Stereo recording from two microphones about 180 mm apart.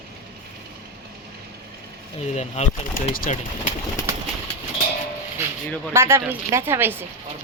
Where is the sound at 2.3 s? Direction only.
40° left (ahead or behind).